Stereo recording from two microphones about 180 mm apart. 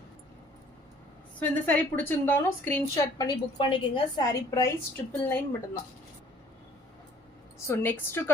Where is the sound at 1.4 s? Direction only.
10° left (ahead or behind).